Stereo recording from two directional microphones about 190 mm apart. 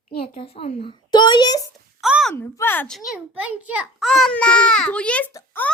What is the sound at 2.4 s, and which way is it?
A child's voice, 10° left (ahead or behind).